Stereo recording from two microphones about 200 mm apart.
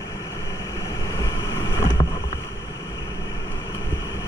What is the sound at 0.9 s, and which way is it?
Boat, 15° left (ahead or behind).